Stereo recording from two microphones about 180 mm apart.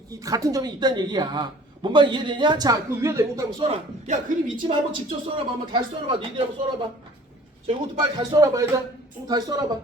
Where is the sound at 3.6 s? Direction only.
40° right (ahead or behind).